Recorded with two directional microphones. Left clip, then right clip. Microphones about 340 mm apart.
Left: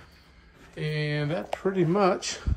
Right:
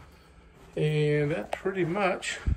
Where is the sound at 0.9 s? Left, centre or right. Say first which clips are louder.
Right 2 dB; centre.